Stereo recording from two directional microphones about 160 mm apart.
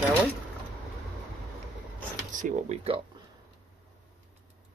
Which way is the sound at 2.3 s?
50° right (ahead or behind).